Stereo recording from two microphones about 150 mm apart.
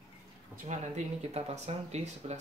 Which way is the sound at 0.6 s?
55° right (ahead or behind).